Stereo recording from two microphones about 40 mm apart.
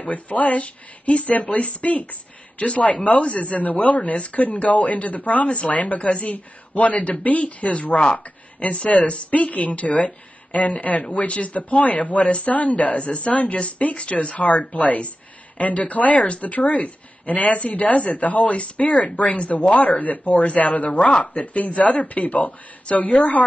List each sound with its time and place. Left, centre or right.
0.0 s speech: left
19.5 s speech: left